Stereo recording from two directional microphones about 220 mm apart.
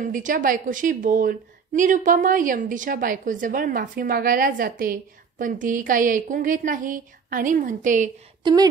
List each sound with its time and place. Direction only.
0.0 s a woman's voice: 35° right (ahead or behind)